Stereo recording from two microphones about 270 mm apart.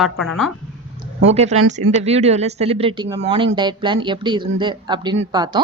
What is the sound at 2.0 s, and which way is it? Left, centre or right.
A woman's voice, right.